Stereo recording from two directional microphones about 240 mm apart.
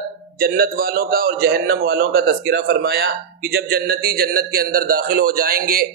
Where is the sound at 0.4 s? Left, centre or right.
Right.